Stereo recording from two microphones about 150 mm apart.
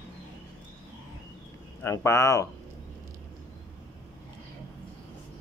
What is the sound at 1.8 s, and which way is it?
Speech, 20° left (ahead or behind).